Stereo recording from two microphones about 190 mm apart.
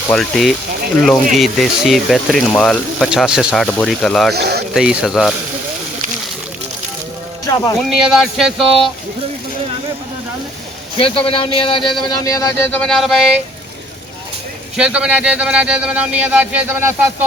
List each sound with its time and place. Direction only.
0.1 s speech: centre (ahead or behind)
4.4 s speech: 60° right (ahead or behind)
4.7 s speech: 5° right (ahead or behind)
7.5 s speech: 20° left (ahead or behind)
7.9 s speech: centre (ahead or behind)
10.9 s speech: 30° left (ahead or behind)
12.8 s speech: centre (ahead or behind)
14.8 s speech: 5° right (ahead or behind)